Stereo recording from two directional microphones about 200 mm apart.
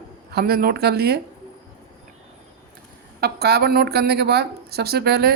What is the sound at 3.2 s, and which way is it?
A man's voice, 50° right (ahead or behind).